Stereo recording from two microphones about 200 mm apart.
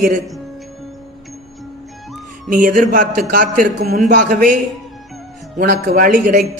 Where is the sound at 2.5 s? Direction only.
40° right (ahead or behind).